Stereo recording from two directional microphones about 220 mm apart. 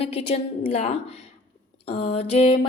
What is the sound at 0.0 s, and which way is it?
A woman's voice, 25° left (ahead or behind).